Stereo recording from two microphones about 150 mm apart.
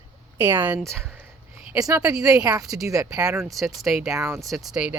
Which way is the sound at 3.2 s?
5° right (ahead or behind).